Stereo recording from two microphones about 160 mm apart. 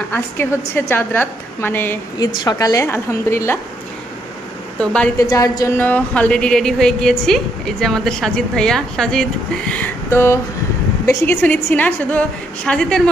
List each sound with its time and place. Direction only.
0.1 s a woman's voice: 15° left (ahead or behind)
2.1 s a woman's voice: 25° left (ahead or behind)
4.7 s a woman's voice: 5° left (ahead or behind)
5.1 s a woman's voice: 20° left (ahead or behind)
5.8 s a woman's voice: 10° left (ahead or behind)